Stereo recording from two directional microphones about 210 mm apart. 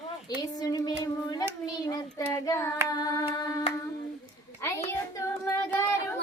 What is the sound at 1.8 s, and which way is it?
Child singing, 20° left (ahead or behind).